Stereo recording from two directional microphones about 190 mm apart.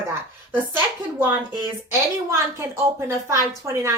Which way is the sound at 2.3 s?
15° right (ahead or behind).